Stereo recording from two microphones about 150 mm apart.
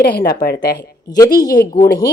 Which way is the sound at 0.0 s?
90° left.